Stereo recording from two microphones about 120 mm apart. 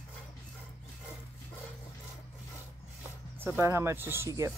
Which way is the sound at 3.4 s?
20° right (ahead or behind).